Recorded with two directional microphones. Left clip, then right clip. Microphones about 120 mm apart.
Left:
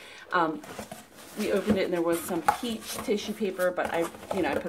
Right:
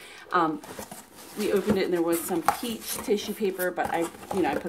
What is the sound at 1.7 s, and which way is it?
Speech, 25° right (ahead or behind).